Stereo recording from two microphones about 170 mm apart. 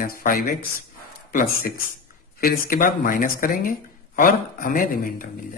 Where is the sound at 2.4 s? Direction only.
55° left (ahead or behind).